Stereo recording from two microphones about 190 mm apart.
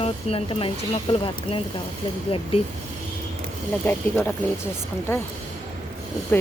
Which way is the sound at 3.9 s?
10° left (ahead or behind).